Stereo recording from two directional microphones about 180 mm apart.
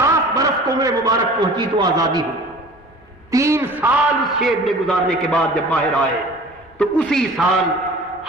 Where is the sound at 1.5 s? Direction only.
25° right (ahead or behind).